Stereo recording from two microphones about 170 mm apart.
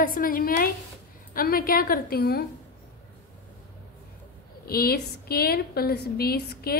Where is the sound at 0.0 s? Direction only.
55° left (ahead or behind).